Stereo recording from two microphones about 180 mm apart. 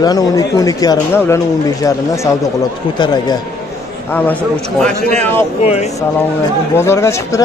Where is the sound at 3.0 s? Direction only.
25° left (ahead or behind).